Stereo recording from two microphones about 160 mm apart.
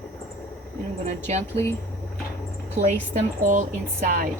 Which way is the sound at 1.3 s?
45° right (ahead or behind).